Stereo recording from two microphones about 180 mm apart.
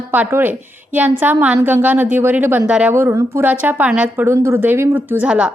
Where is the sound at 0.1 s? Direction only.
10° right (ahead or behind).